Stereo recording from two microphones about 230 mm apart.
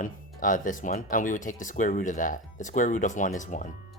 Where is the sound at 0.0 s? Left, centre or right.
Left.